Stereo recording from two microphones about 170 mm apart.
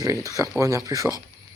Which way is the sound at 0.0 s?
20° right (ahead or behind).